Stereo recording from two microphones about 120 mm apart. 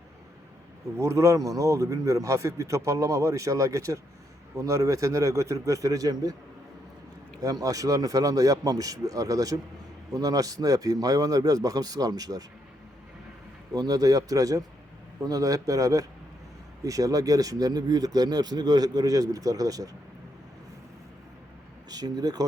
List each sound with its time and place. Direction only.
0.9 s a man's voice: 25° right (ahead or behind)
7.4 s a man's voice: 30° right (ahead or behind)
13.7 s a man's voice: 30° right (ahead or behind)
21.8 s speech: 35° right (ahead or behind)